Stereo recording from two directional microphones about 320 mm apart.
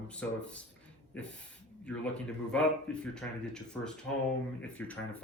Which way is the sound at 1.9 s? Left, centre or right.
Centre.